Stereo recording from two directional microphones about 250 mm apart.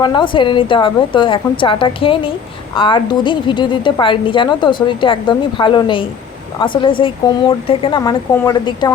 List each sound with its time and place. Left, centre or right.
0.0 s a woman's voice: centre